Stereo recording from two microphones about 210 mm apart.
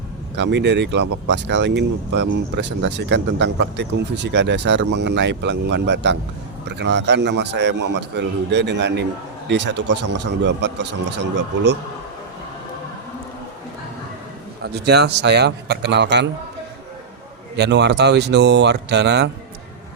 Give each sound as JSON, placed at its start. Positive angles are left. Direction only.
{"t": 0.3, "sound": "speech", "side_deg": -55}
{"t": 14.6, "sound": "a man's voice", "side_deg": -50}
{"t": 17.6, "sound": "a man's voice", "side_deg": -55}